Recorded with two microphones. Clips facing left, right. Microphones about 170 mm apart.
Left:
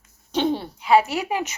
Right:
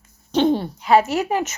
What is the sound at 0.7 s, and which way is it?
Speech, 40° right (ahead or behind).